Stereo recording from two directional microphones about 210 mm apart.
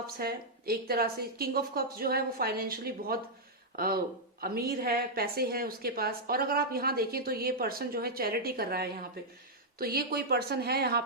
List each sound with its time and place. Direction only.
0.2 s a woman's voice: 45° right (ahead or behind)
4.4 s a woman's voice: 45° right (ahead or behind)